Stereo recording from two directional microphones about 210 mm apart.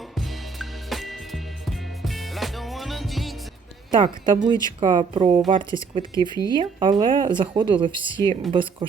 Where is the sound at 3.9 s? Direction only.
20° right (ahead or behind).